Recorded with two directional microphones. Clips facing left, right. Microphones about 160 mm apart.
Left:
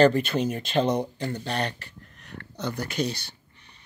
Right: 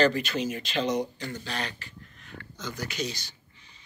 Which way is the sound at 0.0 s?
55° left (ahead or behind).